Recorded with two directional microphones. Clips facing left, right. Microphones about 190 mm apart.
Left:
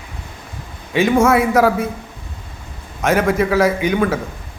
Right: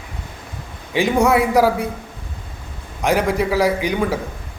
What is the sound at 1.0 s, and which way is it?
Speech, 15° right (ahead or behind).